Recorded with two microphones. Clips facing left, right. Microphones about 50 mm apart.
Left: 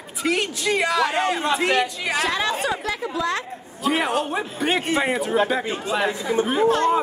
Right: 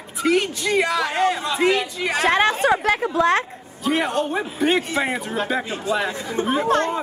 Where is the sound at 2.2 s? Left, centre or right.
Right.